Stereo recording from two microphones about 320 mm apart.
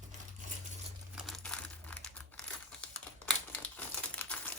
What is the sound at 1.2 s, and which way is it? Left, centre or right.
Crumpling, centre.